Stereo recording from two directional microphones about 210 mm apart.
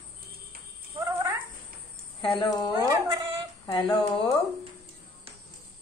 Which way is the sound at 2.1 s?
20° left (ahead or behind).